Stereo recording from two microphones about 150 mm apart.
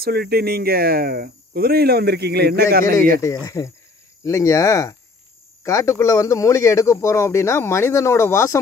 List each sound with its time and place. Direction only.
0.0 s speech: 90° right
3.4 s speech: 20° left (ahead or behind)